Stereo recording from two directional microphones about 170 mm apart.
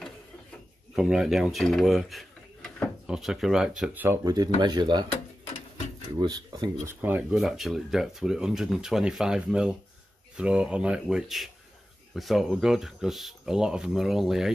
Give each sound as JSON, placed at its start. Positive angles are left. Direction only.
{"t": 0.9, "sound": "speech", "side_deg": -5}
{"t": 6.2, "sound": "speech", "side_deg": -25}
{"t": 7.0, "sound": "speech", "side_deg": -10}